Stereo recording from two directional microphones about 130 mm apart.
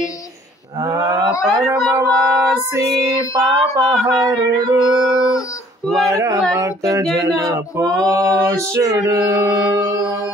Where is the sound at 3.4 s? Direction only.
25° right (ahead or behind).